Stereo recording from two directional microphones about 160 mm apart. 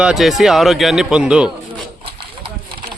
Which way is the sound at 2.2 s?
30° right (ahead or behind).